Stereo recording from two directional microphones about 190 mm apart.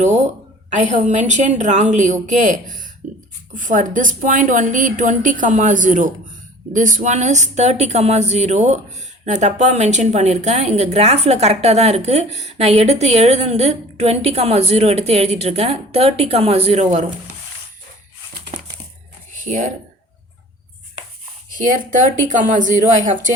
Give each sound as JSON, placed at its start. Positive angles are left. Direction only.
{"t": 0.7, "sound": "a woman's voice", "side_deg": -40}
{"t": 18.5, "sound": "a sound", "side_deg": -35}
{"t": 19.5, "sound": "a woman's voice", "side_deg": -40}
{"t": 21.7, "sound": "a woman's voice", "side_deg": -45}